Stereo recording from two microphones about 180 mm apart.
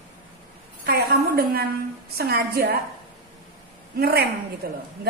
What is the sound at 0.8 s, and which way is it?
A woman's voice, 60° right (ahead or behind).